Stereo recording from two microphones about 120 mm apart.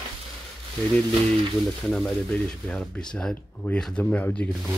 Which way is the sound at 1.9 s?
5° left (ahead or behind).